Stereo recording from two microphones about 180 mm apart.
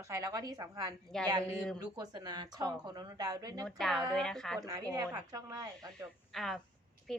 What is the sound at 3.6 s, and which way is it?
Speech, centre (ahead or behind).